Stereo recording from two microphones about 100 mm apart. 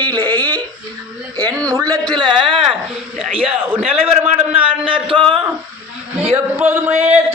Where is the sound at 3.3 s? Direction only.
65° right (ahead or behind).